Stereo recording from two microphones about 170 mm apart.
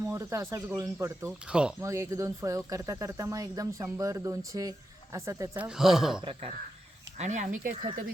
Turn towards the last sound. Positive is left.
turn(degrees=-50)  # may be behind; listen again after turning